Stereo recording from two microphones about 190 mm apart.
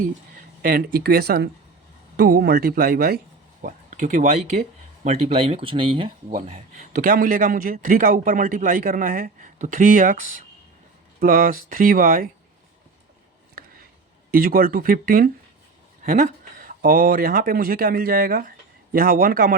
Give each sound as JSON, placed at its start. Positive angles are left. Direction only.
{"t": 0.0, "sound": "speech", "side_deg": -45}
{"t": 3.6, "sound": "speech", "side_deg": -45}
{"t": 11.2, "sound": "speech", "side_deg": -50}
{"t": 14.3, "sound": "speech", "side_deg": -50}